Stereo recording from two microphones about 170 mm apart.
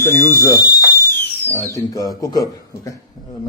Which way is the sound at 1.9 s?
20° left (ahead or behind).